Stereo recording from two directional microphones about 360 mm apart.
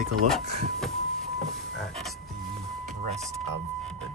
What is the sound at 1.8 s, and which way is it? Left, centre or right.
Frog, centre.